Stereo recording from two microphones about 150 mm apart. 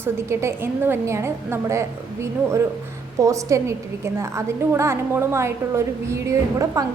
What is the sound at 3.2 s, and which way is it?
A woman's voice, 20° right (ahead or behind).